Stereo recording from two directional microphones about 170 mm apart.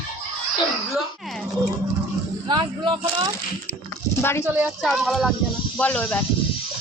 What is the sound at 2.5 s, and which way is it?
Speech, 30° right (ahead or behind).